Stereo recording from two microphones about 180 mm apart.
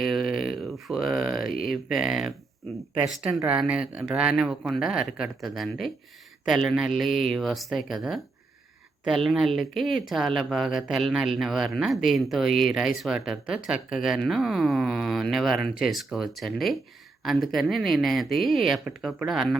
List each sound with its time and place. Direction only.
0.0 s a sound: centre (ahead or behind)
1.5 s speech: 55° left (ahead or behind)
1.7 s speech: centre (ahead or behind)